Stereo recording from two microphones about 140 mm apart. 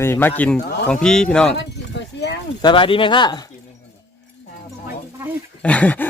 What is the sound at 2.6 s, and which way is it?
Speech, 35° left (ahead or behind).